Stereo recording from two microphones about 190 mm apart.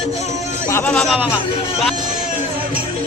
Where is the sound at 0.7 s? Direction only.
5° left (ahead or behind).